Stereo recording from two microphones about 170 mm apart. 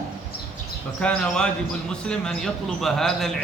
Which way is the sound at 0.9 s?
5° left (ahead or behind).